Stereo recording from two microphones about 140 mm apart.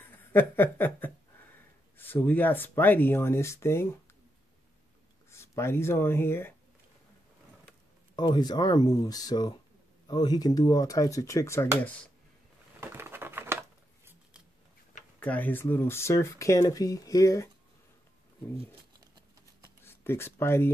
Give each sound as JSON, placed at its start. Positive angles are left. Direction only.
{"t": 0.1, "sound": "speech", "side_deg": 15}
{"t": 5.3, "sound": "speech", "side_deg": 20}
{"t": 8.2, "sound": "speech", "side_deg": 30}
{"t": 12.8, "sound": "a sound", "side_deg": -15}
{"t": 15.1, "sound": "speech", "side_deg": 10}
{"t": 19.8, "sound": "speech", "side_deg": 15}